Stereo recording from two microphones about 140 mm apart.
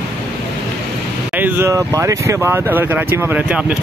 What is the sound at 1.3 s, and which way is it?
Speech, 10° right (ahead or behind).